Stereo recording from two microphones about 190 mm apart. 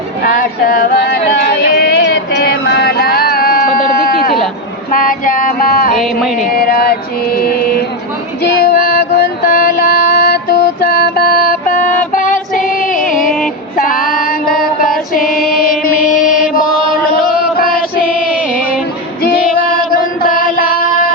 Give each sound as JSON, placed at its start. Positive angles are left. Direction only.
{"t": 0.2, "sound": "a sound", "side_deg": 50}
{"t": 1.6, "sound": "music", "side_deg": 55}
{"t": 4.9, "sound": "female singing", "side_deg": 45}
{"t": 6.5, "sound": "mantra", "side_deg": 55}
{"t": 8.5, "sound": "music", "side_deg": 50}
{"t": 13.7, "sound": "female singing", "side_deg": 50}
{"t": 19.2, "sound": "female singing", "side_deg": 55}